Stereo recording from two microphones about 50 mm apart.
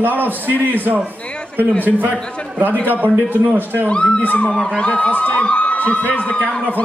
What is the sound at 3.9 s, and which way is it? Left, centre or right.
A man's voice, centre.